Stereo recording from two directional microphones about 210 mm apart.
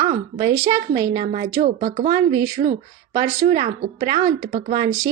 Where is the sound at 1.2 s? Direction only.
35° right (ahead or behind).